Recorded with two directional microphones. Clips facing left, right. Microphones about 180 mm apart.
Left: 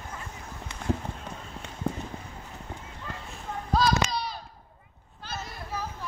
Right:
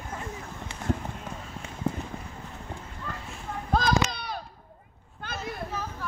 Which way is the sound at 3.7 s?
55° right (ahead or behind).